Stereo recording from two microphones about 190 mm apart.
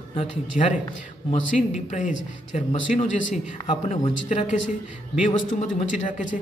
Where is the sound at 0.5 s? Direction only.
45° left (ahead or behind).